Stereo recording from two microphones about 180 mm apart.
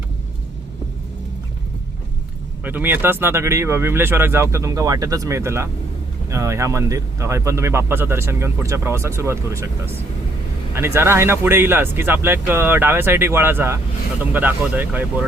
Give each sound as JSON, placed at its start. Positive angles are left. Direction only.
{"t": 2.6, "sound": "speech", "side_deg": -10}